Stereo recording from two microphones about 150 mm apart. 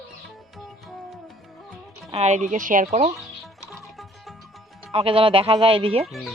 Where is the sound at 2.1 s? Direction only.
50° right (ahead or behind).